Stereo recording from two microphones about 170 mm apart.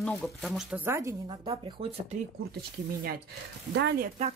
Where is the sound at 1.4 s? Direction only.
35° right (ahead or behind).